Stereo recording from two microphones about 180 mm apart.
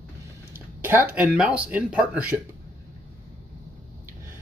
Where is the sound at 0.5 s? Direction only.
10° right (ahead or behind).